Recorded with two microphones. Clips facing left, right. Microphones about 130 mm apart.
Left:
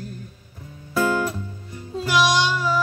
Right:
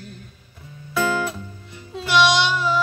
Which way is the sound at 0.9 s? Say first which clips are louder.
Left 1 dB; 40° left (ahead or behind).